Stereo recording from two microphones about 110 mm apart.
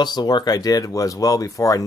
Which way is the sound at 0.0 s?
40° left (ahead or behind).